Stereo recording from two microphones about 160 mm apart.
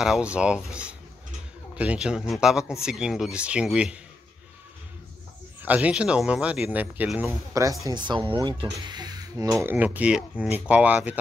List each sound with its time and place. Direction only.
0.0 s speech: 5° right (ahead or behind)
5.6 s speech: 10° right (ahead or behind)
7.5 s speech: 20° right (ahead or behind)